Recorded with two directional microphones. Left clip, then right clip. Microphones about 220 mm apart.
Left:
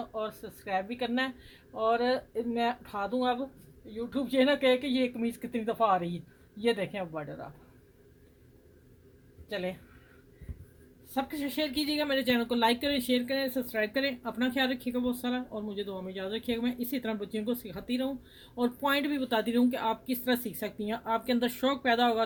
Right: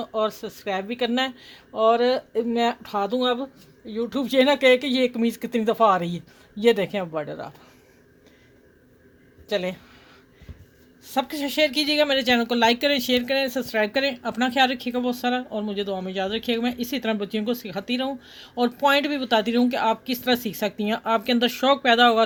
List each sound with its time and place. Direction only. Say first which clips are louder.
0.0 s speech: right 11 dB; 45° right (ahead or behind)
9.5 s speech: right 9 dB; 45° right (ahead or behind)
11.1 s speech: right 8 dB; 50° right (ahead or behind)